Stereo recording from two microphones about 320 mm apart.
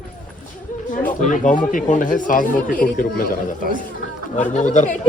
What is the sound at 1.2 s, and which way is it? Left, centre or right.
A man's voice, left.